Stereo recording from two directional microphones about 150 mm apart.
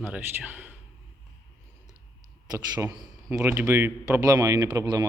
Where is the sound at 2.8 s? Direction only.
20° right (ahead or behind).